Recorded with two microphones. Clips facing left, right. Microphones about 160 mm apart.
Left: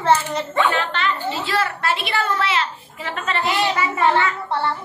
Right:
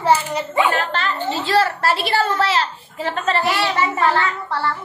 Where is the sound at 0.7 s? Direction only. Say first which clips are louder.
Even; 40° right (ahead or behind).